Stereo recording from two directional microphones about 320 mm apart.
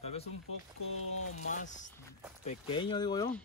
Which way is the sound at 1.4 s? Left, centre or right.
Left.